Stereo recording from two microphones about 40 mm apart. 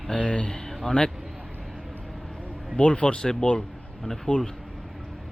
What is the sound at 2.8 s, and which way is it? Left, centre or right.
Speech, left.